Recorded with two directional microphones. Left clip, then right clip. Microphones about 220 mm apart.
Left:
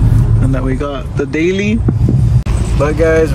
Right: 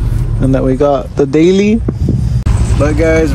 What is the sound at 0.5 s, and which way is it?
Speech, 20° right (ahead or behind).